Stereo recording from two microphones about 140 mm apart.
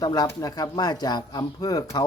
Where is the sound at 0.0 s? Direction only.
30° left (ahead or behind).